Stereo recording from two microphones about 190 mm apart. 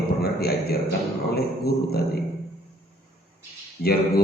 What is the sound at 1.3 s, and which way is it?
Speech, 55° left (ahead or behind).